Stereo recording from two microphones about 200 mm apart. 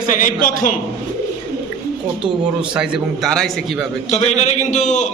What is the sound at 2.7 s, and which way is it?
A man's voice, centre (ahead or behind).